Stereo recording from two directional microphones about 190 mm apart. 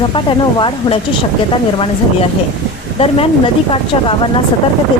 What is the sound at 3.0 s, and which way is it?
Speech, 30° left (ahead or behind).